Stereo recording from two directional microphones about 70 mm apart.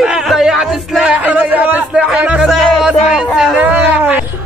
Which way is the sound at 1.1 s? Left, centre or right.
Right.